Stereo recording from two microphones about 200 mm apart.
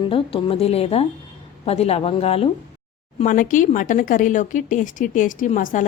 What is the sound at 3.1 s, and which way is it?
A woman's voice, 40° left (ahead or behind).